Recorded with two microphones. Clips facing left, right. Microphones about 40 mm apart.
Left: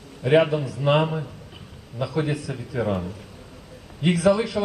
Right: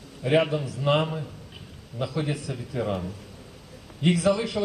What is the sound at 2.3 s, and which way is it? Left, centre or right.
Speech, centre.